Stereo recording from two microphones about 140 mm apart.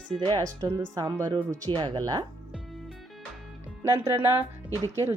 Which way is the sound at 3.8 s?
20° right (ahead or behind).